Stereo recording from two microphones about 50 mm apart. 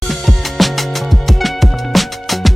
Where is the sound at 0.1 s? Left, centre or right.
Centre.